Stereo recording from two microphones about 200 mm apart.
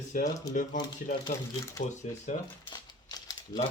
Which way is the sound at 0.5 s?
40° left (ahead or behind).